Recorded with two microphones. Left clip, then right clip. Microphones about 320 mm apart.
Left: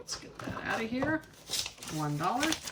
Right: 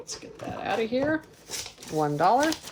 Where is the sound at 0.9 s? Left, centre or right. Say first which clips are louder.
Right 6 dB; centre.